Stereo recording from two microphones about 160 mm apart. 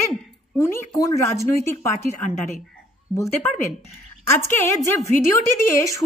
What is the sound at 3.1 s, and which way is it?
Speech, centre (ahead or behind).